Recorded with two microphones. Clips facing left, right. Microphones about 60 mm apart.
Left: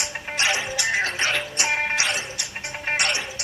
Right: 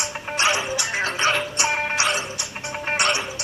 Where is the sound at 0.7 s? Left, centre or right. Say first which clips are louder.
Left 1 dB; left.